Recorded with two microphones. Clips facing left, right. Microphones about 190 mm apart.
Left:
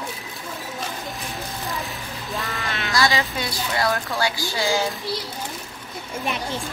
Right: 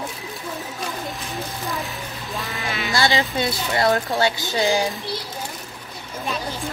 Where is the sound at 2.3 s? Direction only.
Centre (ahead or behind).